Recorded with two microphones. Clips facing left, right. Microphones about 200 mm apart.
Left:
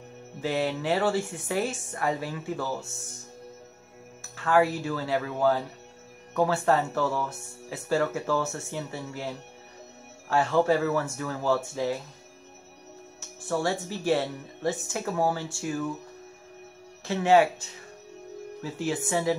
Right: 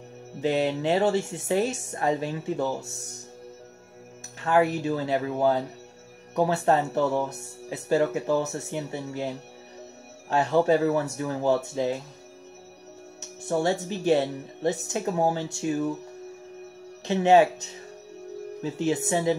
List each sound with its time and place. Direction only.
0.4 s a woman's voice: 20° right (ahead or behind)
4.4 s a woman's voice: 20° right (ahead or behind)
10.3 s a woman's voice: 20° right (ahead or behind)
13.5 s a woman's voice: 20° right (ahead or behind)
17.0 s a woman's voice: 20° right (ahead or behind)